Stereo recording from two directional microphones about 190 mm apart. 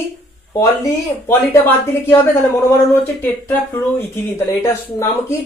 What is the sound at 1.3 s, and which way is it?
Speech, 10° left (ahead or behind).